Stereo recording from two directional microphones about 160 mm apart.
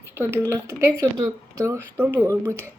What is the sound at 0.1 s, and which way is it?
Speech, 15° right (ahead or behind).